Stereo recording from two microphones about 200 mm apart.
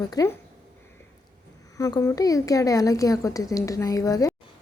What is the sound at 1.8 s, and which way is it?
A woman's voice, 15° left (ahead or behind).